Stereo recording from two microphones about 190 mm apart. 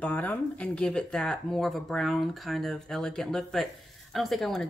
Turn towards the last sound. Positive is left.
turn(degrees=0)  # may be behind; listen again after turning